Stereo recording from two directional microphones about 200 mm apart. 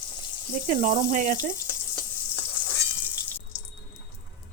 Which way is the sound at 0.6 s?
40° right (ahead or behind).